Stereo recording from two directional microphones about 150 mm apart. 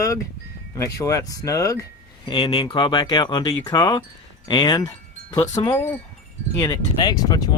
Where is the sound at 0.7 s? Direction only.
20° left (ahead or behind).